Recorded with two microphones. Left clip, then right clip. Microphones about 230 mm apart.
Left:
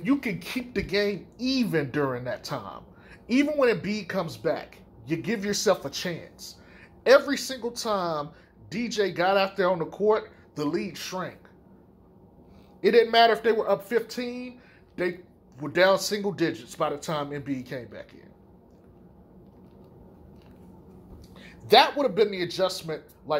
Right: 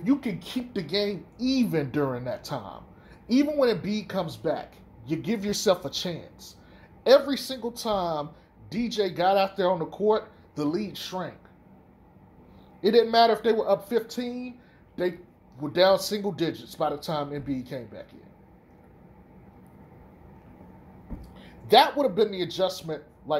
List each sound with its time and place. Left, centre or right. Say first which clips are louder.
0.0 s speech: even; left
13.1 s speech: left 1 dB; left
15.6 s speech: even; left
21.4 s speech: even; left